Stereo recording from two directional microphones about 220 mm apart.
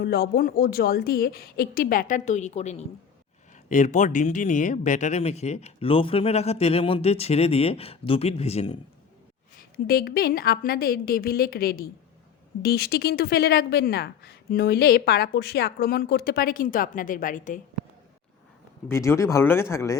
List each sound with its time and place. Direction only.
0.0 s a woman's voice: 45° left (ahead or behind)
9.6 s speech: 45° left (ahead or behind)
18.9 s speech: 10° left (ahead or behind)